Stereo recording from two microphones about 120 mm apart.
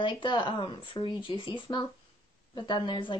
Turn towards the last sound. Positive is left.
turn(degrees=40)  # may be behind; listen again after turning